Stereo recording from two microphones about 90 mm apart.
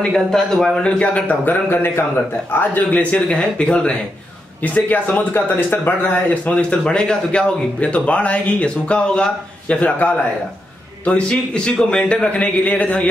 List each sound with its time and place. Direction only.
0.1 s a man's voice: 5° left (ahead or behind); by 2.0 s 25° left (ahead or behind)
2.7 s speech: 15° left (ahead or behind)